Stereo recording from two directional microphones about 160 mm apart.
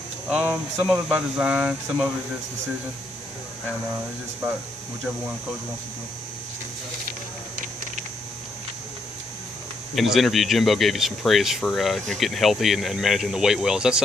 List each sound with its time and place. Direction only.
0.3 s speech: 5° right (ahead or behind)
7.5 s a sound: 55° right (ahead or behind)
9.9 s speech: centre (ahead or behind)